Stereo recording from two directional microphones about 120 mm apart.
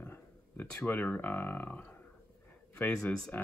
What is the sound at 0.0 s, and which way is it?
Speech, 15° left (ahead or behind).